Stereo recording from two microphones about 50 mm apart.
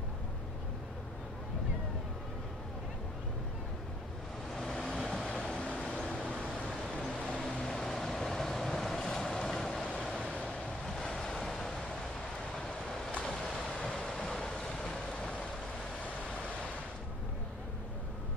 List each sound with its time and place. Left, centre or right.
4.6 s vehicle: centre
6.7 s vehicle: centre
10.0 s waves: centre
10.3 s waves: centre
10.9 s train: centre
13.2 s vehicle: centre